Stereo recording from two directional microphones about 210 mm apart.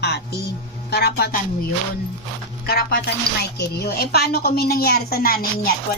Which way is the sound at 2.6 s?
45° left (ahead or behind).